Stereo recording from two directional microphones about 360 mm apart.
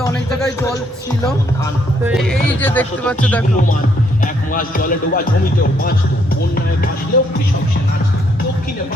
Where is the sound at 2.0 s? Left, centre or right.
Centre.